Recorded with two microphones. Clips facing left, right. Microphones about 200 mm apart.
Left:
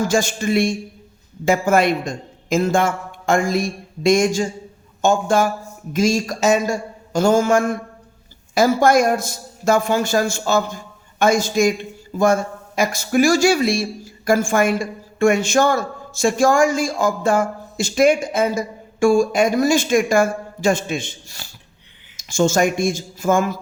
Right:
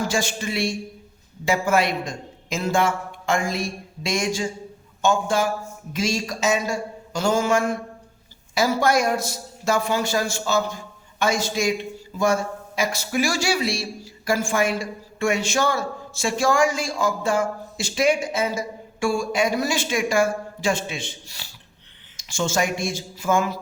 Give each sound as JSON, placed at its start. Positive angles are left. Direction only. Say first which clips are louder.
{"t": 0.0, "sound": "speech", "louder": "left 6 dB", "side_deg": 45}